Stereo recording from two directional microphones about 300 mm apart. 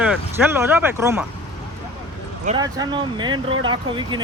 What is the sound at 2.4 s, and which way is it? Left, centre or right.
Speech, centre.